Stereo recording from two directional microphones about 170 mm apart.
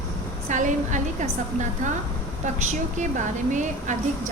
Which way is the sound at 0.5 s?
45° right (ahead or behind).